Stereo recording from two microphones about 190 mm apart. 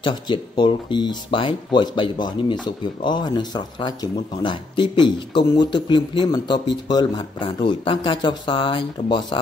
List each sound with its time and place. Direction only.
0.0 s speech: 25° left (ahead or behind)